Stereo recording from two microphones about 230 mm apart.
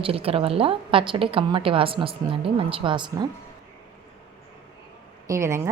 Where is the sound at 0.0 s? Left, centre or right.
Right.